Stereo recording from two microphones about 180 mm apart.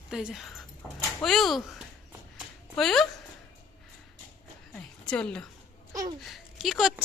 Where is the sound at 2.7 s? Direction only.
Centre (ahead or behind).